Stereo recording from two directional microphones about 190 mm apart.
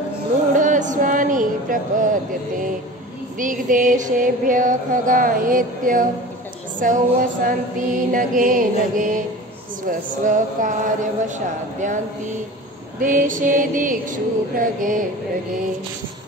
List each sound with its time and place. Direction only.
0.6 s music: 40° right (ahead or behind)
3.3 s music: 45° right (ahead or behind)
11.2 s speech: 40° right (ahead or behind)
13.0 s music: 45° right (ahead or behind)